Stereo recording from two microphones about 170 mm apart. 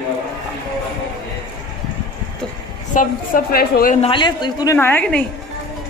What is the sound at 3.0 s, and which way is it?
A woman's voice, 60° left (ahead or behind).